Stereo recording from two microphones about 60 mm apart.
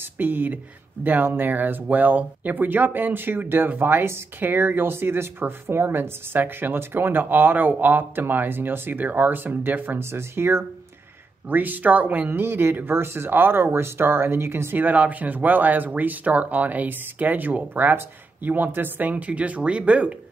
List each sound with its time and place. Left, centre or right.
0.0 s speech: right
11.4 s speech: right
12.3 s speech: right